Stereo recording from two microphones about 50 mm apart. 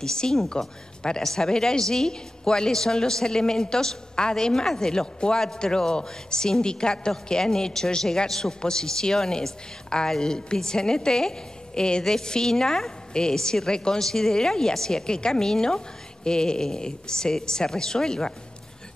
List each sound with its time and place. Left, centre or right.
0.0 s a woman's voice: centre